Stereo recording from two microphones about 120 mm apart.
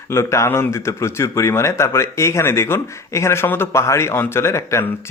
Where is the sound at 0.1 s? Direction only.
20° left (ahead or behind).